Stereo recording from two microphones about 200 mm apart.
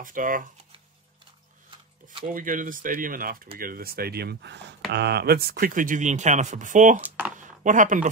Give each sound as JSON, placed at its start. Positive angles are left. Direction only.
{"t": 0.0, "sound": "speech", "side_deg": -40}
{"t": 2.3, "sound": "speech", "side_deg": -40}
{"t": 7.0, "sound": "speech", "side_deg": -10}
{"t": 7.3, "sound": "a sound", "side_deg": -40}